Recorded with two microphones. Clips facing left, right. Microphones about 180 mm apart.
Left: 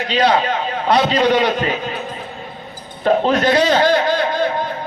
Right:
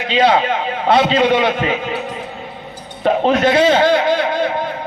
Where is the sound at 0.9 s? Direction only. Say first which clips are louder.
Right 2 dB; 25° right (ahead or behind).